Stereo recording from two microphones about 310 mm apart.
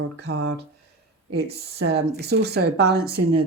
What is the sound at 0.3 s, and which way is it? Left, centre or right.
Speech, right.